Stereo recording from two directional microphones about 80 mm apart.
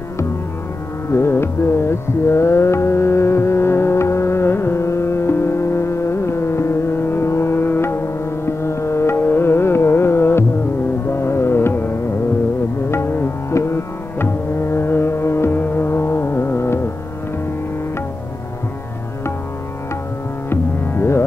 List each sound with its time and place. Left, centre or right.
1.1 s music: left
12.9 s music: left
20.4 s music: left